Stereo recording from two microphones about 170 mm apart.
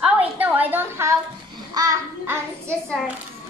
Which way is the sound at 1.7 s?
20° right (ahead or behind).